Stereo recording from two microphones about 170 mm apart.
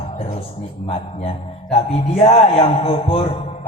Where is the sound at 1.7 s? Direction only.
35° left (ahead or behind).